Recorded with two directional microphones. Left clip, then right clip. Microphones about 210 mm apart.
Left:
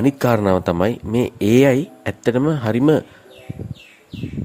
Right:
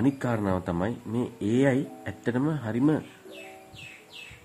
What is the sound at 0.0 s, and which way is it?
Speech, 35° left (ahead or behind).